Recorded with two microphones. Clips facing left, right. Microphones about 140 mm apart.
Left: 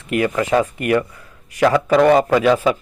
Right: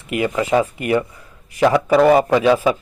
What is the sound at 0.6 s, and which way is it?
Speech, 25° right (ahead or behind).